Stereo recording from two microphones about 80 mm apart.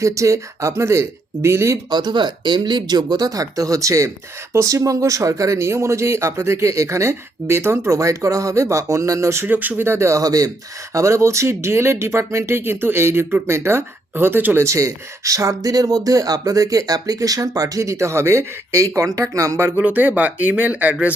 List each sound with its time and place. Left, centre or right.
0.0 s speech: right
1.9 s speech: right
9.5 s speech: right
10.9 s speech: right
14.6 s speech: right; by 21.2 s centre